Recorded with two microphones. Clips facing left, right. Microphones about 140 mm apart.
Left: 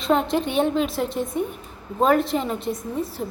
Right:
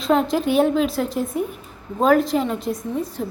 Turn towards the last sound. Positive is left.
turn(degrees=0)  # may be behind; listen again after turning